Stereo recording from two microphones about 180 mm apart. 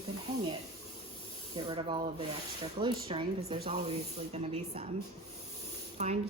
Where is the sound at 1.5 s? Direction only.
25° right (ahead or behind).